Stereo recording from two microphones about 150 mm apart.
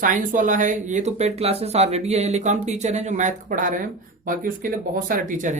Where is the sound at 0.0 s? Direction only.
60° right (ahead or behind).